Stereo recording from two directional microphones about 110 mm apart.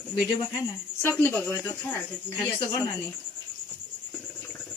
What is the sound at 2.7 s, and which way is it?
Speech, 35° left (ahead or behind).